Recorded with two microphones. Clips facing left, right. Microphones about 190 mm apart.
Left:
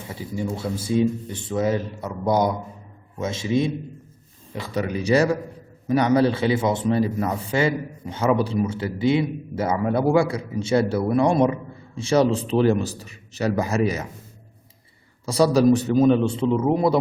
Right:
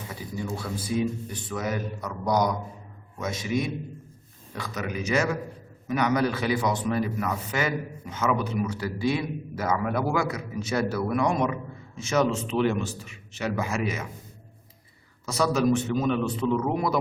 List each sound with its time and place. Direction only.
0.1 s a man's voice: 25° left (ahead or behind)
15.3 s a man's voice: 35° left (ahead or behind)